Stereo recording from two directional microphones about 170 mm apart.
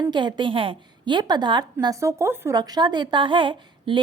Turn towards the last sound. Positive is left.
turn(degrees=-30)  # may be behind; listen again after turning